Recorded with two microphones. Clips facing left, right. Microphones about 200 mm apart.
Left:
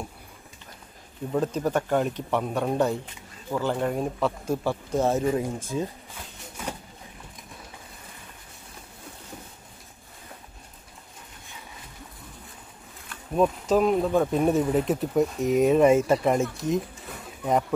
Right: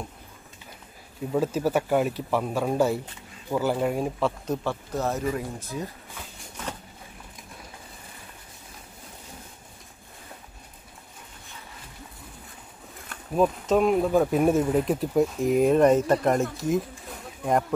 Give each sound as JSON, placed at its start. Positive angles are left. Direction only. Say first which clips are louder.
{"t": 1.3, "sound": "speech", "louder": "right 1 dB", "side_deg": -5}
{"t": 4.9, "sound": "speech", "louder": "left 5 dB", "side_deg": 30}
{"t": 6.6, "sound": "boat", "louder": "left 1 dB", "side_deg": 10}
{"t": 13.3, "sound": "speech", "louder": "even", "side_deg": 0}